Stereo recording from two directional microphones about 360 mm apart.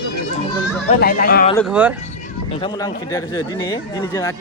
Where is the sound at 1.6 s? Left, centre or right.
Centre.